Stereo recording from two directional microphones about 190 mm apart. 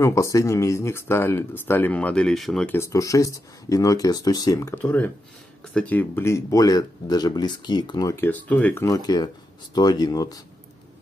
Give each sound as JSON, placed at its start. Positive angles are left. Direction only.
{"t": 0.0, "sound": "speech", "side_deg": 15}